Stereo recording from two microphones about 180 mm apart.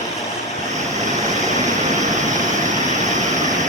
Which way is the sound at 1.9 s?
40° right (ahead or behind).